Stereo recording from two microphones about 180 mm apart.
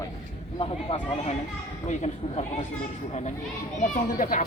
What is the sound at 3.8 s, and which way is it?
Speech, 45° left (ahead or behind).